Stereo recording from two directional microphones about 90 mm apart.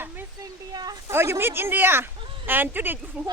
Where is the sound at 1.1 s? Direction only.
30° right (ahead or behind).